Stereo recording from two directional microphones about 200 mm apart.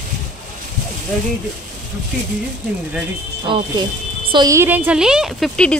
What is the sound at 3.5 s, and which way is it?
Speech, 25° right (ahead or behind).